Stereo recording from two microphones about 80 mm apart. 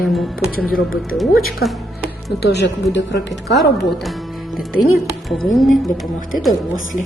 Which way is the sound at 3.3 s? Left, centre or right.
Centre.